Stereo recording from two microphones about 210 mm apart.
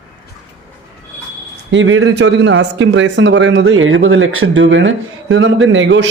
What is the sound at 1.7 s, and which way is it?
Speech, 70° right (ahead or behind).